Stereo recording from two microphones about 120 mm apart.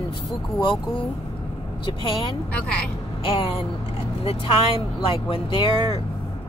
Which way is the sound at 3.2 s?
50° left (ahead or behind).